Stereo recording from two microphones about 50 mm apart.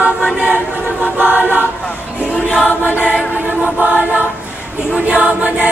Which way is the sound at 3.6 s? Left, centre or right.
Right.